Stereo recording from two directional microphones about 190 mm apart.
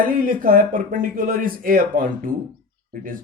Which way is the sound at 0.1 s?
45° right (ahead or behind).